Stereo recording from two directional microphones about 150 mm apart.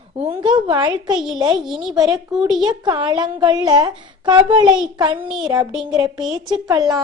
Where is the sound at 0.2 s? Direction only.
35° right (ahead or behind).